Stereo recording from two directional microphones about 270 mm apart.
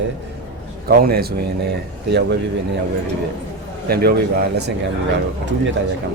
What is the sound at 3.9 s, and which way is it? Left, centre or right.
Speech, right.